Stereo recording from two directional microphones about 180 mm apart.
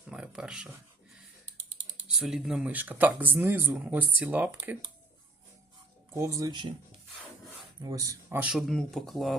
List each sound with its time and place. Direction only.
0.1 s speech: 5° right (ahead or behind)
2.1 s speech: centre (ahead or behind)
6.1 s speech: 15° right (ahead or behind)
7.8 s speech: 20° right (ahead or behind)
8.4 s speech: 5° right (ahead or behind)